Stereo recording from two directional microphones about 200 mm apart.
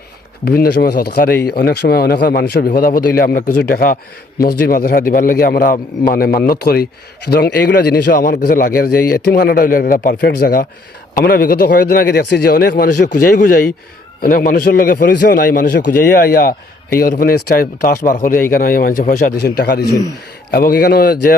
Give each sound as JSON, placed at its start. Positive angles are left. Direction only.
{"t": 0.4, "sound": "a man's voice", "side_deg": 50}